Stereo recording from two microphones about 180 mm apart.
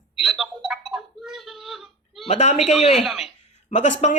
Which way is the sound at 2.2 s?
40° left (ahead or behind).